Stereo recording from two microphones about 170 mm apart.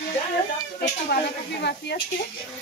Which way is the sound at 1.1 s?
80° left.